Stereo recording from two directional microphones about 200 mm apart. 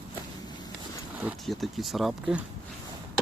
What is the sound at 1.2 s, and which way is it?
Speech, 5° right (ahead or behind).